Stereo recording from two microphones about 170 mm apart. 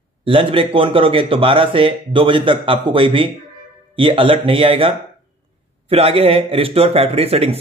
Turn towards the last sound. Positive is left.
turn(degrees=-35)  # may be behind; listen again after turning